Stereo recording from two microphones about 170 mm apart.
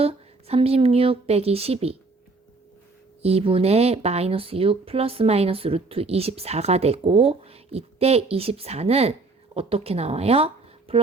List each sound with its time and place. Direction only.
0.0 s a woman's voice: 35° right (ahead or behind)
3.2 s speech: 35° right (ahead or behind)